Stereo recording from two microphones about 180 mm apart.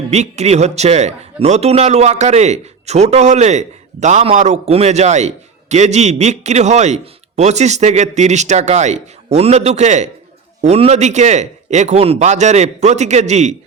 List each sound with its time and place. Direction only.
0.1 s a man's voice: 35° right (ahead or behind)